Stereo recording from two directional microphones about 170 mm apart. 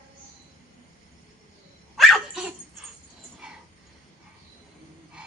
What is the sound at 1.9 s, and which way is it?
Dog, centre (ahead or behind).